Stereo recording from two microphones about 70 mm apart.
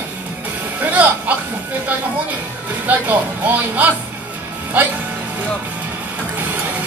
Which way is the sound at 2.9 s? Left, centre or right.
Right.